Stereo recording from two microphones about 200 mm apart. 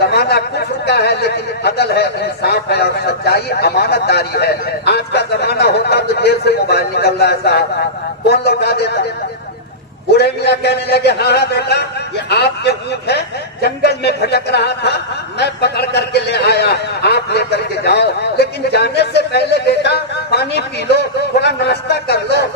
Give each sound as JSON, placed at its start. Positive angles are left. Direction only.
{"t": 0.0, "sound": "a man's voice", "side_deg": 55}
{"t": 10.1, "sound": "a man's voice", "side_deg": 55}